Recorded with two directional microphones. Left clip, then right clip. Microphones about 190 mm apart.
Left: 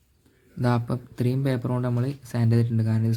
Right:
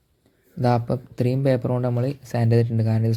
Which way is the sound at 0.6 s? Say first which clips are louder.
Right 5 dB; 15° right (ahead or behind).